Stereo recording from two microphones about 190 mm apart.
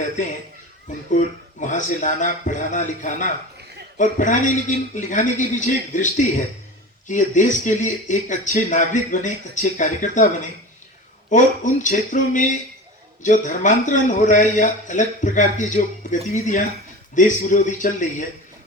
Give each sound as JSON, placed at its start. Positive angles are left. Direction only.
{"t": 0.0, "sound": "a man's voice", "side_deg": 40}